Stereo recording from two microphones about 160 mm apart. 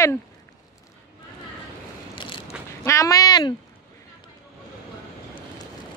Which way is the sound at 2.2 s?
30° left (ahead or behind).